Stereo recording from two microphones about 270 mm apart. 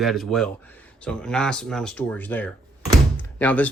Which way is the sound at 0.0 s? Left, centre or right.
Centre.